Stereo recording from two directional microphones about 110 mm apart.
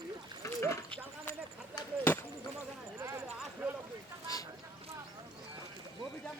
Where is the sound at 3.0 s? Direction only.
30° right (ahead or behind).